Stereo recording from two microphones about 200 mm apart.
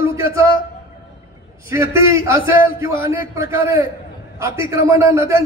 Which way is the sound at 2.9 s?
45° left (ahead or behind).